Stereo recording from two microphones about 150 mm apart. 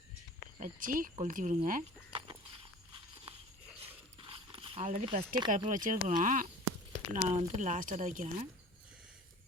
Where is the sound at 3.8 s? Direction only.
40° right (ahead or behind).